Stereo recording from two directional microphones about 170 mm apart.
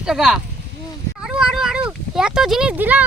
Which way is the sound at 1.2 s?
5° right (ahead or behind).